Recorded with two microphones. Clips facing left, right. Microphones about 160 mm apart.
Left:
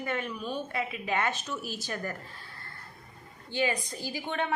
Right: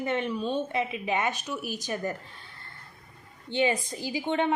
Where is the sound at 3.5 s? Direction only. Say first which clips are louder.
Right 4 dB; 20° right (ahead or behind).